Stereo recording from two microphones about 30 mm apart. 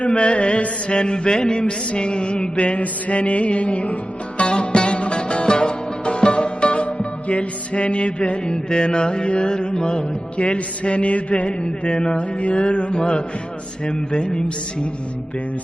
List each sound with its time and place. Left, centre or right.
0.0 s a man's voice: left
1.9 s mantra: left
4.4 s music: left
8.4 s music: left
10.3 s mantra: left
11.6 s a man's voice: left